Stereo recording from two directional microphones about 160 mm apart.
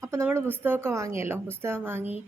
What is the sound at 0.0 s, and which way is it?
A woman's voice, 15° right (ahead or behind).